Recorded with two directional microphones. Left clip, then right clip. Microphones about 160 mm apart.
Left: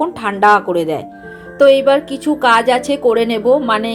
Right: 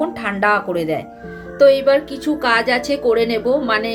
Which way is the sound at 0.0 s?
30° left (ahead or behind).